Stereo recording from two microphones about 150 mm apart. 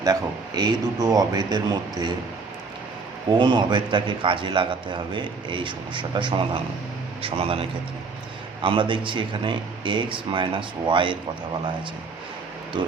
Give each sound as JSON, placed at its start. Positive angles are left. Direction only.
{"t": 0.0, "sound": "speech", "side_deg": -25}
{"t": 3.3, "sound": "a man's voice", "side_deg": -30}
{"t": 12.7, "sound": "a man's voice", "side_deg": -30}